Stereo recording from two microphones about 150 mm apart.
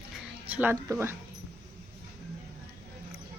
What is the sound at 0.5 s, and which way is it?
Speech, 10° right (ahead or behind).